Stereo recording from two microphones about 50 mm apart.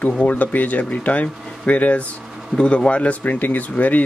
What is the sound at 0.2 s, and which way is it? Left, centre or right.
Speech, left.